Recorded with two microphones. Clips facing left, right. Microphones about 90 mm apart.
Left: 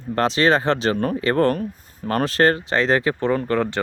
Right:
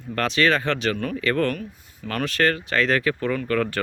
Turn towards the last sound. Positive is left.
turn(degrees=25)  # may be behind; listen again after turning